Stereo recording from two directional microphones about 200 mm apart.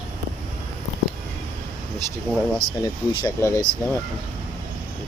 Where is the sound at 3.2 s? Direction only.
15° left (ahead or behind).